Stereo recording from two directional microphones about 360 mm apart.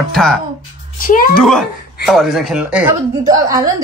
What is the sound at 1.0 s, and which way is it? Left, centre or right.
Speech, left.